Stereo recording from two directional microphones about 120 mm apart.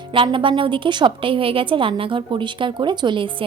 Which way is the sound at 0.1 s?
45° right (ahead or behind).